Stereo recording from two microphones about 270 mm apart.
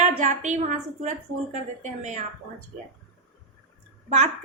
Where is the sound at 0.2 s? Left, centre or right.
Right.